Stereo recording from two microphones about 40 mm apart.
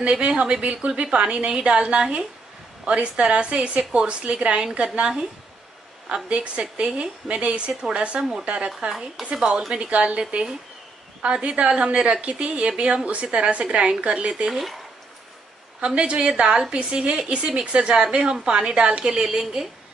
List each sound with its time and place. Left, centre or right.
0.0 s a woman's voice: right
6.2 s a woman's voice: right
9.2 s speech: centre
9.8 s a woman's voice: right
14.5 s speech: centre
15.8 s a woman's voice: right